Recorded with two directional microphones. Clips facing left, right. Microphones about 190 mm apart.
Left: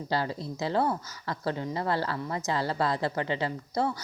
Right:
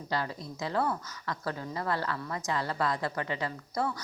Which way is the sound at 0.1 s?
30° left (ahead or behind).